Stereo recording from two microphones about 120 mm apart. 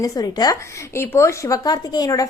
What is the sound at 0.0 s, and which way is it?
Speech, 35° left (ahead or behind).